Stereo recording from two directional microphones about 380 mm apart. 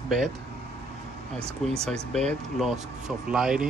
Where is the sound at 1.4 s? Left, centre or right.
Centre.